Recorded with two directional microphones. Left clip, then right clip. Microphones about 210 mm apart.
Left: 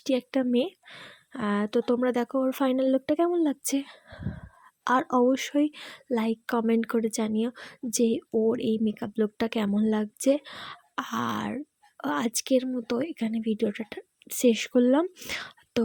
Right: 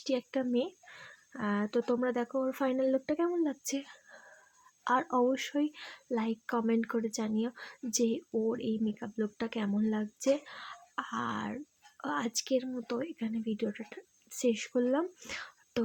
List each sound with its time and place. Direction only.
0.0 s speech: 35° left (ahead or behind)